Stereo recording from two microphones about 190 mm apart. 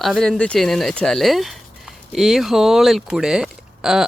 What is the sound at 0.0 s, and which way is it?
Speech, centre (ahead or behind).